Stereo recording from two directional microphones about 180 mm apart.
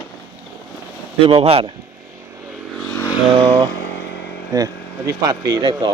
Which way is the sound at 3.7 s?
70° left (ahead or behind).